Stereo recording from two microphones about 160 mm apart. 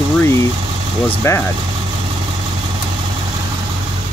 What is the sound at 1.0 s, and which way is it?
Speech, 15° left (ahead or behind).